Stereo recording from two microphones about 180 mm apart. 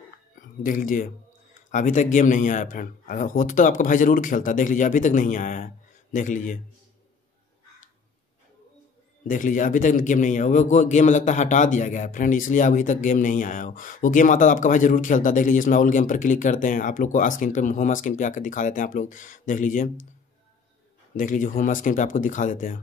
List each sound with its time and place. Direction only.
0.4 s a man's voice: 50° left (ahead or behind)
9.3 s a man's voice: 45° left (ahead or behind)
21.2 s a man's voice: 45° left (ahead or behind)